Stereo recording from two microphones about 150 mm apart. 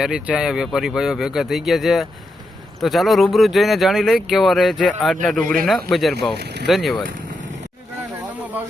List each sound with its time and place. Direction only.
0.0 s speech: 5° right (ahead or behind)
6.3 s speech: 90° right
6.7 s speech: centre (ahead or behind)